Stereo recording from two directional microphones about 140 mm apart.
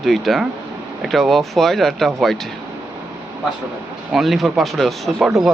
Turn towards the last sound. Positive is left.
turn(degrees=-5)  # may be behind; listen again after turning